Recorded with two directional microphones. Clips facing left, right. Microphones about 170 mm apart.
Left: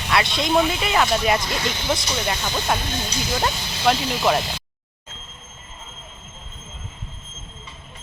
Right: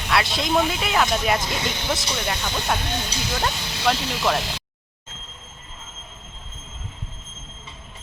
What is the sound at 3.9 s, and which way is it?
Speech, 5° left (ahead or behind).